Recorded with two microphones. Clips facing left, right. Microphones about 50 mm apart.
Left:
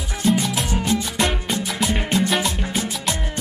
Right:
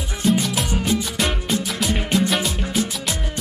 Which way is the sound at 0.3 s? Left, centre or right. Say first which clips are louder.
Even; centre.